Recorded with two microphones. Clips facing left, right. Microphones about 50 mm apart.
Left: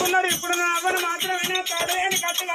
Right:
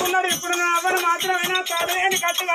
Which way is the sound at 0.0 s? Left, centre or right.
Centre.